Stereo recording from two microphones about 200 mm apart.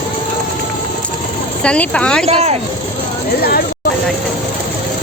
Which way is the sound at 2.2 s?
30° right (ahead or behind).